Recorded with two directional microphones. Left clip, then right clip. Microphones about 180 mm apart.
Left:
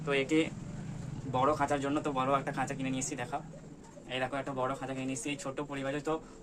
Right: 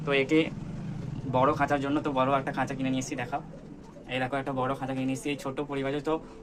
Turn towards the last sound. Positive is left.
turn(degrees=-30)  # may be behind; listen again after turning